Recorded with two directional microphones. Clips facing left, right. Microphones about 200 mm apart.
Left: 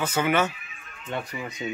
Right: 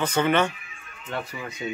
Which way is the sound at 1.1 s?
20° left (ahead or behind).